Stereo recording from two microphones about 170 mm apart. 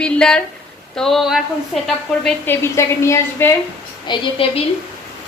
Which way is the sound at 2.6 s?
15° left (ahead or behind).